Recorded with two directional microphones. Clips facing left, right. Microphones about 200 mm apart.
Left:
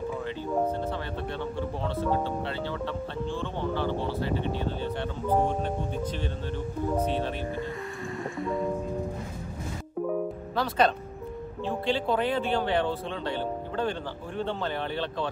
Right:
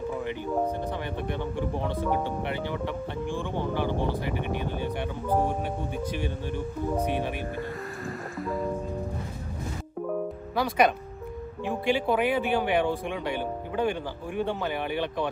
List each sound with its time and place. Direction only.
1.2 s speech: 15° right (ahead or behind)
8.4 s music: centre (ahead or behind)
10.5 s speech: 10° right (ahead or behind)